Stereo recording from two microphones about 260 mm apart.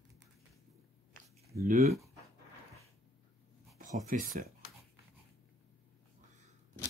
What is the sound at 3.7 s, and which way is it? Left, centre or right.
Speech, right.